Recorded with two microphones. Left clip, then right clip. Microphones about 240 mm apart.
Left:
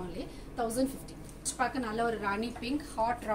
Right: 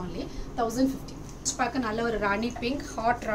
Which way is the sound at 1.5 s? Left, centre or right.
Centre.